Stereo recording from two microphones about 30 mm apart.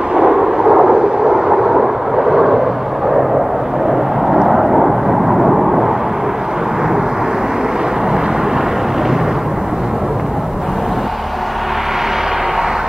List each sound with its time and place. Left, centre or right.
0.1 s thunder: right
4.5 s vehicle: centre